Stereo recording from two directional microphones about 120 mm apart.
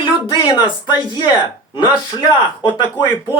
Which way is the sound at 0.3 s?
35° left (ahead or behind).